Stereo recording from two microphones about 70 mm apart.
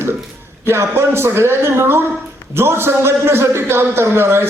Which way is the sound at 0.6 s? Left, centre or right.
Right.